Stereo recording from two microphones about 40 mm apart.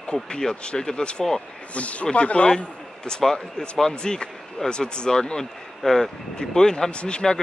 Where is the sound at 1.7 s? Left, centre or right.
Left; by 5.4 s centre.